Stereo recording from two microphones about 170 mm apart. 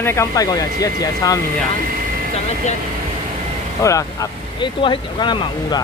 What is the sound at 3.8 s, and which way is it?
Speech, 20° left (ahead or behind).